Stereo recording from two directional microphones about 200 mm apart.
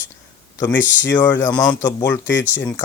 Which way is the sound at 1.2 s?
10° left (ahead or behind).